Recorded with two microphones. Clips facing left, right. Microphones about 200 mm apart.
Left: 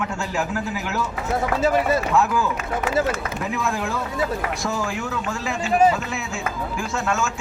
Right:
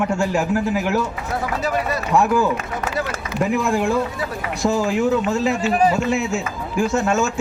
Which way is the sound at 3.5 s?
15° right (ahead or behind).